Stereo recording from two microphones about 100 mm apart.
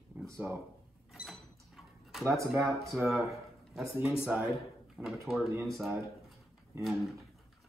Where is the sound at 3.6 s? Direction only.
Centre (ahead or behind).